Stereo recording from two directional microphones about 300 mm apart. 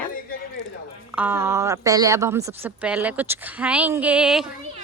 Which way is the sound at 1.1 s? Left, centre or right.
Centre.